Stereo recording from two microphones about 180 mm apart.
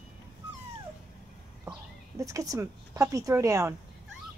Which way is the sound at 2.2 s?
20° right (ahead or behind).